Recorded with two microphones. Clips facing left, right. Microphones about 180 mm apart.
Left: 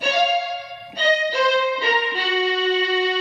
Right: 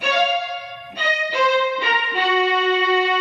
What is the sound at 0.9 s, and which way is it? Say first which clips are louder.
Music: left 3 dB; 35° left (ahead or behind).